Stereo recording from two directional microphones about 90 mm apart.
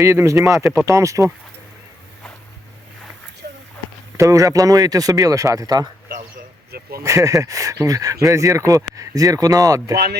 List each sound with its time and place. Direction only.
0.0 s speech: 35° right (ahead or behind)
4.2 s speech: 35° right (ahead or behind)
7.0 s speech: 35° right (ahead or behind)